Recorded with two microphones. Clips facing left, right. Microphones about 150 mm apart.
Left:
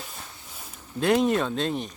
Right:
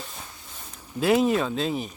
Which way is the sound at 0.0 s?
5° left (ahead or behind).